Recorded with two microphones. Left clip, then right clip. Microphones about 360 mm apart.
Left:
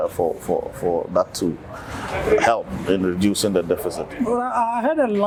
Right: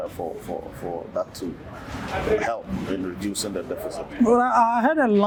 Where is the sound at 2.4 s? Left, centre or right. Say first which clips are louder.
Left 8 dB; left.